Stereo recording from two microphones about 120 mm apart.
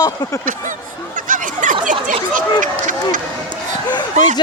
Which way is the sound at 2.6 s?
90° right.